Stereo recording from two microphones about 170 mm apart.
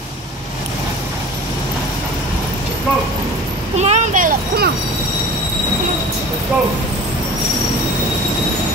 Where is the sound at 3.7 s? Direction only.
40° right (ahead or behind).